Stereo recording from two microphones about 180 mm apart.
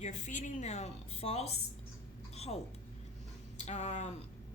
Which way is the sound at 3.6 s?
40° left (ahead or behind).